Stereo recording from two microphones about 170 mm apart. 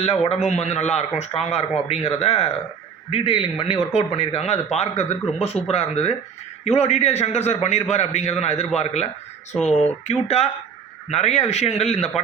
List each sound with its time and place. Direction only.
0.0 s a man's voice: 35° left (ahead or behind)